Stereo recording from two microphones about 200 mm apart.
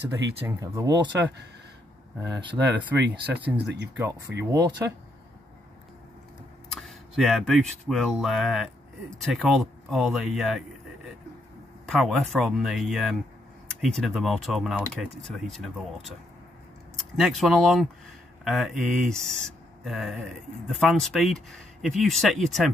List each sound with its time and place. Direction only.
0.5 s speech: 15° right (ahead or behind)
2.1 s speech: 10° right (ahead or behind)
3.6 s speech: 60° right (ahead or behind)
4.0 s speech: 15° right (ahead or behind)
6.7 s speech: centre (ahead or behind)
11.9 s speech: centre (ahead or behind)
17.2 s speech: centre (ahead or behind)